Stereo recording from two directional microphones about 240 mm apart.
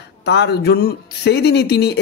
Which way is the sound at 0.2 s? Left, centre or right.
Left.